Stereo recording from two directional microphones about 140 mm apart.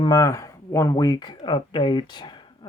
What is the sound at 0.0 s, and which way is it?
Speech, 25° left (ahead or behind).